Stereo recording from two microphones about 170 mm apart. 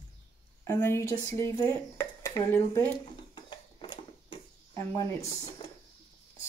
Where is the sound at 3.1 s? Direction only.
30° left (ahead or behind).